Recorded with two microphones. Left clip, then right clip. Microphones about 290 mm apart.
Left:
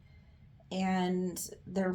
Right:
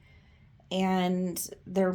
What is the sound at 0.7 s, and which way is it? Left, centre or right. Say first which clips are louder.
Speech: right 5 dB; right.